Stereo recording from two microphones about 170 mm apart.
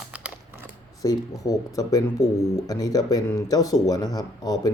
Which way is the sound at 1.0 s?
20° left (ahead or behind).